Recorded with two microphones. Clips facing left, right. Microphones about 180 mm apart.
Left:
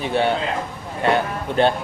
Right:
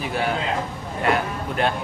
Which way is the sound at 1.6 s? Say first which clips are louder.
Left 6 dB; 30° left (ahead or behind).